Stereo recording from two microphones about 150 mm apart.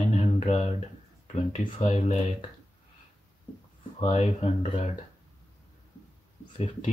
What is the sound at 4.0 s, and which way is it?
Speech, 45° left (ahead or behind).